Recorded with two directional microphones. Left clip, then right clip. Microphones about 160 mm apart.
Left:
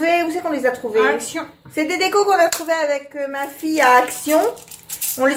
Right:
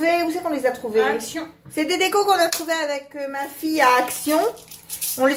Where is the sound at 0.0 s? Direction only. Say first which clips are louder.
Left 2 dB; centre (ahead or behind).